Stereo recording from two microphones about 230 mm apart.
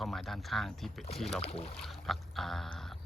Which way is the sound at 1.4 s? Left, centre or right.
Left.